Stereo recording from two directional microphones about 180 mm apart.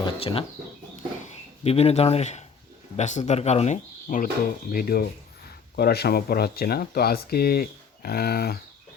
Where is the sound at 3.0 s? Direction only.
40° left (ahead or behind).